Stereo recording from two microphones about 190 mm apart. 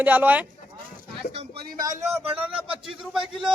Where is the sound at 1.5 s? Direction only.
50° right (ahead or behind).